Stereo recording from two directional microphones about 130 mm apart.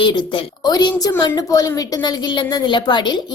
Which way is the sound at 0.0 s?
35° left (ahead or behind).